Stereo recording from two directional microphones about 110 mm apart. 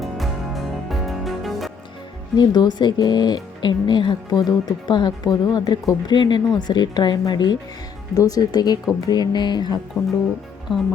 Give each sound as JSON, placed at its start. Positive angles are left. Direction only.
{"t": 0.0, "sound": "music", "side_deg": 0}
{"t": 2.3, "sound": "speech", "side_deg": 40}